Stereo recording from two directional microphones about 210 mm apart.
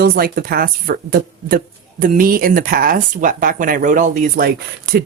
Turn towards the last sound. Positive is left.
turn(degrees=-45)  # may be behind; listen again after turning